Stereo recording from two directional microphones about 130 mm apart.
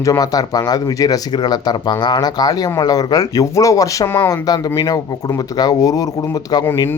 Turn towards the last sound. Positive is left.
turn(degrees=25)  # may be behind; listen again after turning